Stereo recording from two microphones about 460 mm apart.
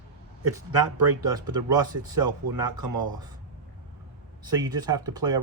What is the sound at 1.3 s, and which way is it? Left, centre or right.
Speech, centre.